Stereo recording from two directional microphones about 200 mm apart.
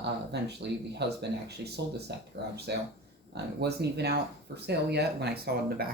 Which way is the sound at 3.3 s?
55° right (ahead or behind).